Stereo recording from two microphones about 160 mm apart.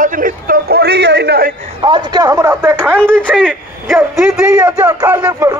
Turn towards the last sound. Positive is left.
turn(degrees=-10)  # may be behind; listen again after turning